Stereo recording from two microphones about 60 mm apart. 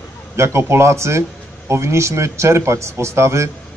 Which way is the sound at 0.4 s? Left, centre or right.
Right.